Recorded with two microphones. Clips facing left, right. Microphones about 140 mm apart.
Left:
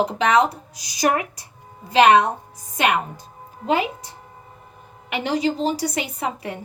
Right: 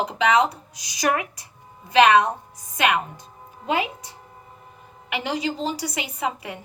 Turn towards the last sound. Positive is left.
turn(degrees=35)  # may be behind; listen again after turning